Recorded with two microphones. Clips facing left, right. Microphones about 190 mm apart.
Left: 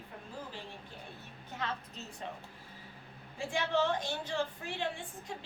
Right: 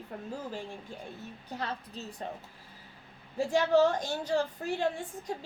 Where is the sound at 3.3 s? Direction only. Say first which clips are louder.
Right 8 dB; 40° right (ahead or behind).